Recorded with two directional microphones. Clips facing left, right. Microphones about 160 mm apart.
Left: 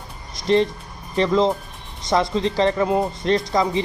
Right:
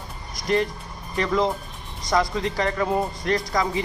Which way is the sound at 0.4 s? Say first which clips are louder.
Left 5 dB; 25° left (ahead or behind).